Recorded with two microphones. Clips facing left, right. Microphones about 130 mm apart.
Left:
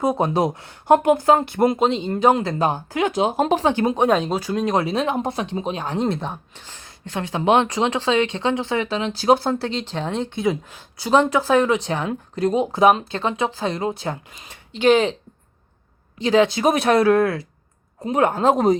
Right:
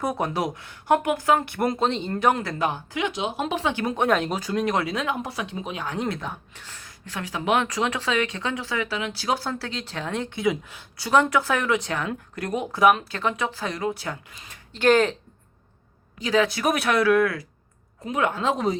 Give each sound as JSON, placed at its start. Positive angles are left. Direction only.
{"t": 0.0, "sound": "speech", "side_deg": 25}
{"t": 3.8, "sound": "speech", "side_deg": 20}
{"t": 16.2, "sound": "speech", "side_deg": 30}